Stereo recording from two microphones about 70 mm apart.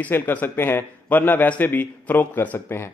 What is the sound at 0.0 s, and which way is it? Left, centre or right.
Speech, left.